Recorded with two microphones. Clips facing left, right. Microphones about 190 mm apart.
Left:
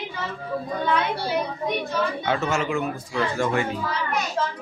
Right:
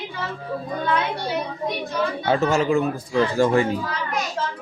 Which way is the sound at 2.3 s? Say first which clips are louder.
Right 9 dB; 35° right (ahead or behind).